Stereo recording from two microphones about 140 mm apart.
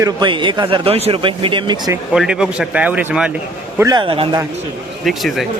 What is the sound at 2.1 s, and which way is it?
Speech, 5° right (ahead or behind).